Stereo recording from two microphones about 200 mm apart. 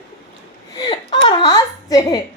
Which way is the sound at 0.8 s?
25° left (ahead or behind).